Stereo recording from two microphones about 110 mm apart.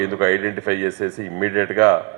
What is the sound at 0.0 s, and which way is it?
A man's voice, 25° right (ahead or behind).